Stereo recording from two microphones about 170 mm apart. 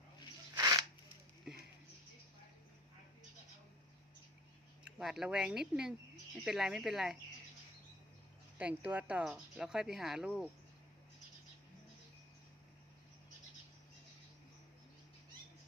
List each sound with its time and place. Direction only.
0.5 s a sound: 20° right (ahead or behind)
4.9 s speech: centre (ahead or behind)
8.5 s speech: 10° right (ahead or behind)